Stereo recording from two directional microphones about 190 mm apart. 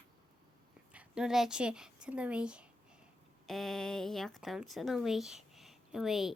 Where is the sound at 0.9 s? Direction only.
5° right (ahead or behind).